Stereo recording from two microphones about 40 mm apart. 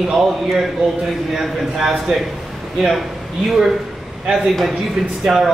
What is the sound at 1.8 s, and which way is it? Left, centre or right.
Speech, centre.